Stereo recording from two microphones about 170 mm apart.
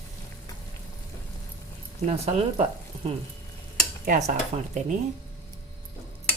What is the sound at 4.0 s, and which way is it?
Speech, 45° right (ahead or behind).